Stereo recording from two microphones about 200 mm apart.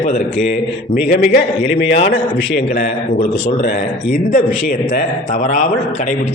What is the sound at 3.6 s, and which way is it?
A man's voice, 45° left (ahead or behind).